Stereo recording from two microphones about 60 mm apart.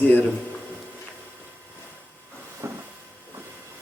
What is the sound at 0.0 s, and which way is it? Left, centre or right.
Speech, left.